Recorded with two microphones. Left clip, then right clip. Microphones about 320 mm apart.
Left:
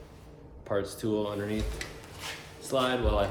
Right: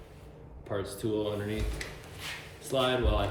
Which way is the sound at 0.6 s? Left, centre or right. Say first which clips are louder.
Left 3 dB; centre.